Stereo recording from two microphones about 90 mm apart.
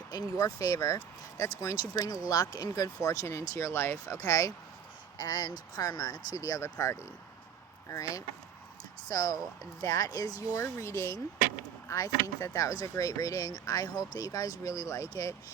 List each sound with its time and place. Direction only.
0.1 s speech: 40° left (ahead or behind)